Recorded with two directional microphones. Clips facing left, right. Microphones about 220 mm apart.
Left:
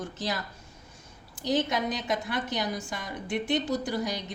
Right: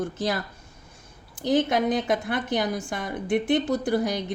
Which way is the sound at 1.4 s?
55° right (ahead or behind).